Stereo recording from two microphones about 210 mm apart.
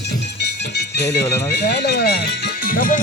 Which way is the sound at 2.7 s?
40° left (ahead or behind).